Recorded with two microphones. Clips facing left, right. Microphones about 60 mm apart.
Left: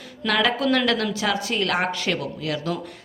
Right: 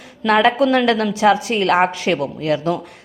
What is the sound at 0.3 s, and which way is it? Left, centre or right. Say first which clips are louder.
A woman's voice: right 7 dB; right.